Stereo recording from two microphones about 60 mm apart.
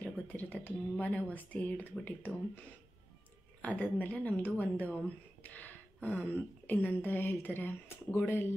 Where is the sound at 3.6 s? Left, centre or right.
Left.